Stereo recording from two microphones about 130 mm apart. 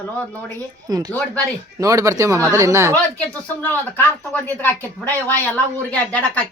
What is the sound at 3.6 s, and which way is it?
A woman's voice, 15° left (ahead or behind).